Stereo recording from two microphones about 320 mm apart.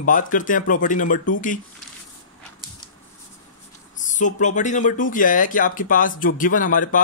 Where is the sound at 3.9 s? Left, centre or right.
Left.